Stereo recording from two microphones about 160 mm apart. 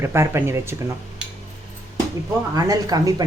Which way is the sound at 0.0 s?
15° right (ahead or behind).